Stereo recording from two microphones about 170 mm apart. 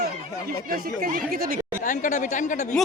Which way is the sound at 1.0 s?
60° right (ahead or behind).